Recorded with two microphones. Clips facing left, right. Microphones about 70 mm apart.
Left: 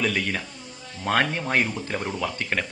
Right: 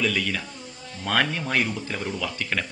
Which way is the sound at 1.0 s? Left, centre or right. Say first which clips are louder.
Left 1 dB; left.